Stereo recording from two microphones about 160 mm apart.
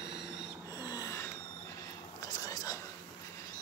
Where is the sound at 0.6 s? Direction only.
20° left (ahead or behind).